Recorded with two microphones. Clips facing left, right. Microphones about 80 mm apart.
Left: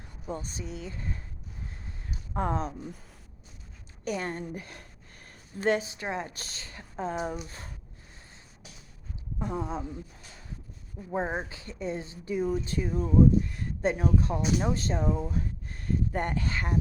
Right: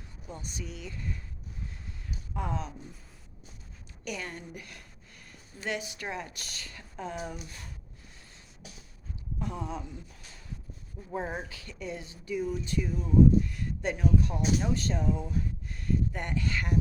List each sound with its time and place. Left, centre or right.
0.3 s speech: left
2.3 s speech: left
4.0 s speech: left
9.4 s speech: left
11.1 s speech: left